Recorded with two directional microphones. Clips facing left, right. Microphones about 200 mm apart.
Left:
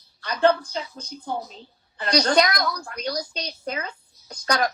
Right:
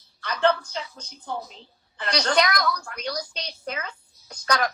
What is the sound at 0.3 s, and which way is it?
A woman's voice, 35° left (ahead or behind).